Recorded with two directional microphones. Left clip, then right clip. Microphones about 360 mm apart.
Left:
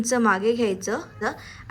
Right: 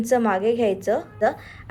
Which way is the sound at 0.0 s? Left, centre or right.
Centre.